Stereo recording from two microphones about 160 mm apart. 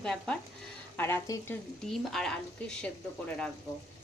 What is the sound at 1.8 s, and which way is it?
Speech, centre (ahead or behind).